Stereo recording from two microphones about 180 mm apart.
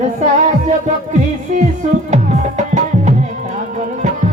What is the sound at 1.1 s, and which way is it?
Music, 40° right (ahead or behind).